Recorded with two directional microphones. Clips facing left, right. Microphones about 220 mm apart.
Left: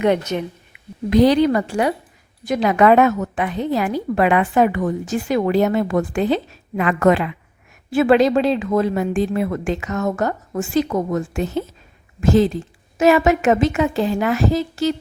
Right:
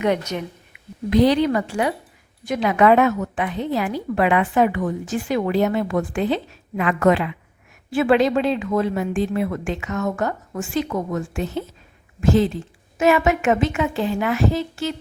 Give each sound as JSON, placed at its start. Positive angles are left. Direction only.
{"t": 0.0, "sound": "a woman's voice", "side_deg": 30}
{"t": 1.1, "sound": "a woman's voice", "side_deg": 40}